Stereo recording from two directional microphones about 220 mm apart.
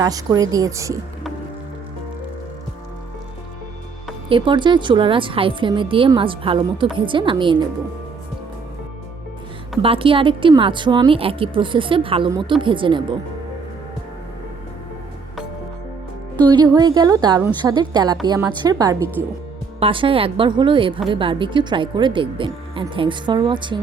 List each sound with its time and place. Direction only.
0.0 s a woman's voice: 15° right (ahead or behind)
4.3 s speech: 20° right (ahead or behind)
9.8 s speech: 25° right (ahead or behind)
16.7 s a woman's voice: 20° right (ahead or behind)